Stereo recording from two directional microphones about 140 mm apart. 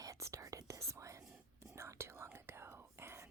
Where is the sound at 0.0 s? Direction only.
20° right (ahead or behind).